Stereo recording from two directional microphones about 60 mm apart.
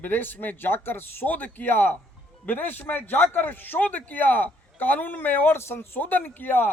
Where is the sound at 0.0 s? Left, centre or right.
Left.